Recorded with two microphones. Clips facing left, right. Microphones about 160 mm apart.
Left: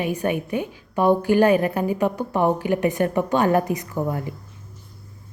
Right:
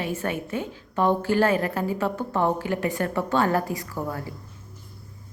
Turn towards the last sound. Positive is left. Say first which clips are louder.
# left 5 dB
turn(degrees=20)  # may be behind; listen again after turning